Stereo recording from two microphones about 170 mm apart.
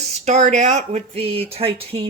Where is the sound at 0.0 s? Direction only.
40° right (ahead or behind).